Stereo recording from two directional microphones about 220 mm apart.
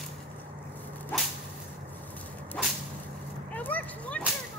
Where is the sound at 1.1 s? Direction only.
5° left (ahead or behind).